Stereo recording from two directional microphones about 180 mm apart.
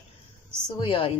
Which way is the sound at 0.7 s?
30° left (ahead or behind).